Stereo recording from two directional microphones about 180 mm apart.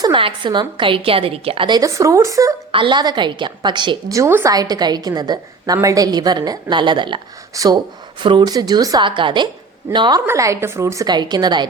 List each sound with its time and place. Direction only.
0.0 s a woman's voice: 30° right (ahead or behind)